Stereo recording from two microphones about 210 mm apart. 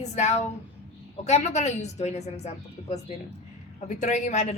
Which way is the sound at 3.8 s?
35° left (ahead or behind).